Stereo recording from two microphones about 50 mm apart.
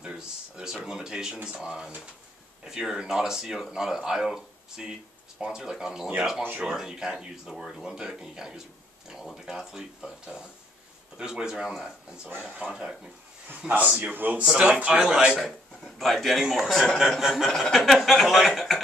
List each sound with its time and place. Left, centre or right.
0.0 s a sound: centre
0.8 s speech: centre
1.6 s speech: centre
12.4 s speech: right
14.1 s speech: right
14.4 s speech: centre
16.0 s a man's voice: centre
17.5 s a man's voice: centre